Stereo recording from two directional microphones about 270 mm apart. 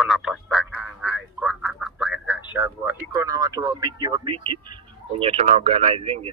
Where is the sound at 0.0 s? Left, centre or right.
Centre.